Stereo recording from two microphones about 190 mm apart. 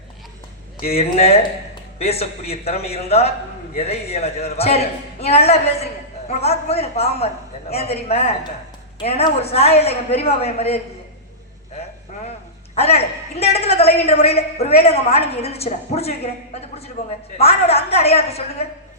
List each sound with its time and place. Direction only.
0.9 s a man's voice: 35° left (ahead or behind)
12.7 s a woman's voice: 35° left (ahead or behind)